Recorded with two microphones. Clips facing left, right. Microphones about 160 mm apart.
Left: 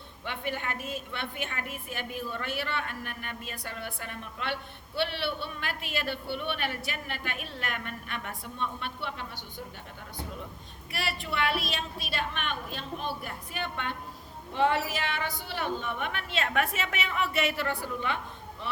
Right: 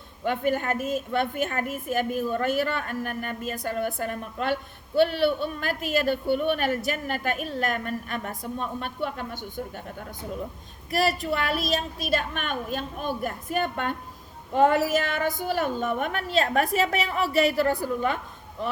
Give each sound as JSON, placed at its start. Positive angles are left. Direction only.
{"t": 0.3, "sound": "a woman's voice", "side_deg": -45}
{"t": 10.9, "sound": "a woman's voice", "side_deg": -40}